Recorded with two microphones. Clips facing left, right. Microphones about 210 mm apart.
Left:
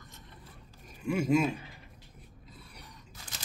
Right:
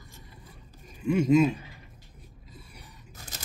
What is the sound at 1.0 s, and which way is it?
Speech, 5° left (ahead or behind).